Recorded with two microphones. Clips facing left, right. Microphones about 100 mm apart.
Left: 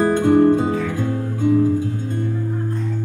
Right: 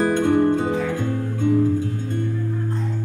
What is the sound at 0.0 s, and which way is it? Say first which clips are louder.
Music: left 4 dB; 20° left (ahead or behind).